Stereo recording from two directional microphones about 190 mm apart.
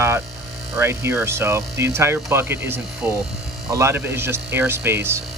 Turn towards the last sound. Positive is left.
turn(degrees=-15)  # may be behind; listen again after turning